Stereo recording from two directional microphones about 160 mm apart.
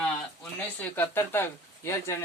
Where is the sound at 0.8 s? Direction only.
15° left (ahead or behind).